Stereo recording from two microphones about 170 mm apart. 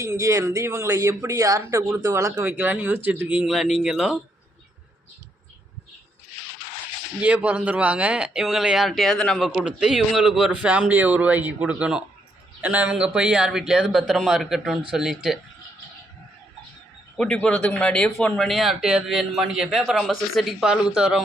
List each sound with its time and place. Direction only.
0.0 s speech: 20° right (ahead or behind)
7.2 s speech: 5° right (ahead or behind)
17.2 s speech: 5° left (ahead or behind)